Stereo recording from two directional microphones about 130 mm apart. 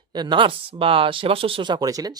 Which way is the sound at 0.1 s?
35° right (ahead or behind).